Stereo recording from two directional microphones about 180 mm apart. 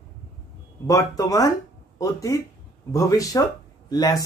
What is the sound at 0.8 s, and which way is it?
Speech, 20° left (ahead or behind).